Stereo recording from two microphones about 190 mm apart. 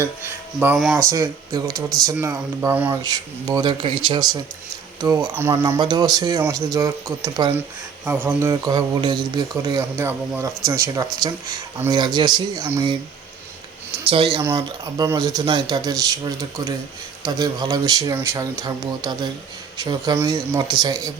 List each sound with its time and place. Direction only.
0.8 s speech: centre (ahead or behind)
1.1 s a man's voice: 15° right (ahead or behind)
8.0 s a man's voice: 10° right (ahead or behind)
14.4 s a man's voice: 20° right (ahead or behind)